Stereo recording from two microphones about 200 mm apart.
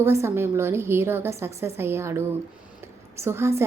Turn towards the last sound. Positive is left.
turn(degrees=-15)  # may be behind; listen again after turning